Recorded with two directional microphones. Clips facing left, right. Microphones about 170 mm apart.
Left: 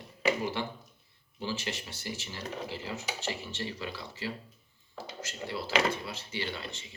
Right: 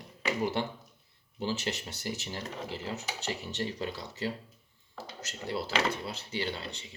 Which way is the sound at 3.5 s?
40° right (ahead or behind).